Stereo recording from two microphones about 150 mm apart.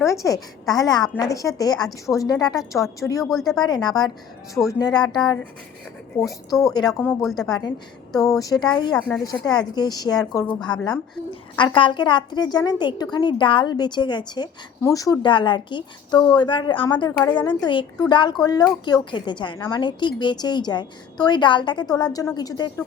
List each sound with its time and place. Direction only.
0.0 s a woman's voice: 20° left (ahead or behind)
3.2 s speech: centre (ahead or behind)
3.8 s a woman's voice: 25° left (ahead or behind)
7.2 s speech: centre (ahead or behind)
8.3 s a woman's voice: 25° left (ahead or behind)
9.0 s speech: 5° left (ahead or behind)
9.2 s a woman's voice: 25° left (ahead or behind)